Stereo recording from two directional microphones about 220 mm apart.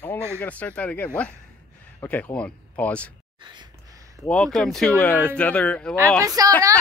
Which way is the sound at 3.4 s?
20° right (ahead or behind).